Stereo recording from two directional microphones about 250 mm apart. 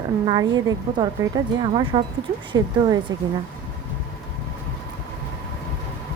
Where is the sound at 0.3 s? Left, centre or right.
Centre.